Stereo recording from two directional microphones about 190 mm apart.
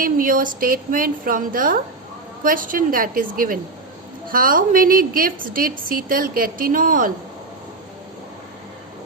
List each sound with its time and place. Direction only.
0.0 s a woman's voice: 45° right (ahead or behind)